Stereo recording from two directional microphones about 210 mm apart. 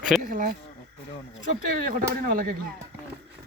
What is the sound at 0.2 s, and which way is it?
Speech, 40° right (ahead or behind).